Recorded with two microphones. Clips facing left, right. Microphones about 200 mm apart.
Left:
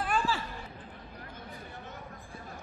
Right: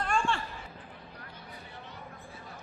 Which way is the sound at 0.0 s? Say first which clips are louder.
Even; 5° left (ahead or behind).